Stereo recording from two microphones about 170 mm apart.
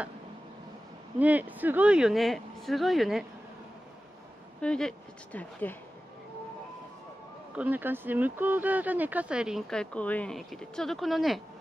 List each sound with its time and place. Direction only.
1.2 s speech: 10° right (ahead or behind)
4.6 s speech: 5° left (ahead or behind)
7.5 s speech: 10° right (ahead or behind)